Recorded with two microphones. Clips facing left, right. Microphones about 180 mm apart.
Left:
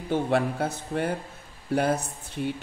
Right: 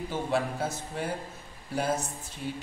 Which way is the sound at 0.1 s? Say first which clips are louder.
Left 6 dB; 60° left (ahead or behind).